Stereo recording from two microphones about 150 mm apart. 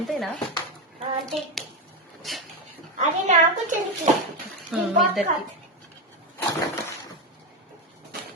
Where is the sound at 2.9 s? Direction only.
50° right (ahead or behind).